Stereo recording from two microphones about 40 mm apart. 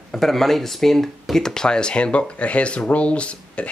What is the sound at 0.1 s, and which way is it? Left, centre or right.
Speech, centre.